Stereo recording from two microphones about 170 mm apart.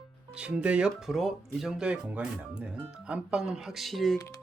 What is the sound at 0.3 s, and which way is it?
Speech, 5° right (ahead or behind).